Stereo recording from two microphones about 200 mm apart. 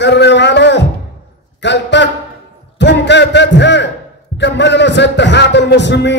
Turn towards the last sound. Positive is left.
turn(degrees=60)  # may be behind; listen again after turning